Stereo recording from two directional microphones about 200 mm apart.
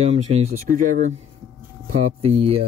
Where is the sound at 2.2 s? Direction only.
30° right (ahead or behind).